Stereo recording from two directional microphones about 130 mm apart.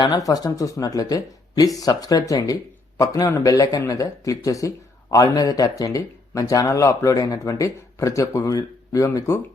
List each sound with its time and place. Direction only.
0.0 s speech: 30° left (ahead or behind)